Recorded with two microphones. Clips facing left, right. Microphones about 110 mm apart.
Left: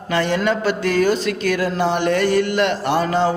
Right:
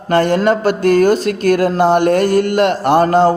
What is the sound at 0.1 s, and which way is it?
Music, 45° right (ahead or behind).